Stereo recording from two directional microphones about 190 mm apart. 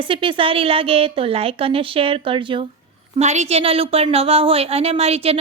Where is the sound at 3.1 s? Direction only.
35° right (ahead or behind).